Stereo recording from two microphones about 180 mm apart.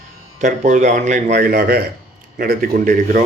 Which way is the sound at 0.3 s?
45° right (ahead or behind).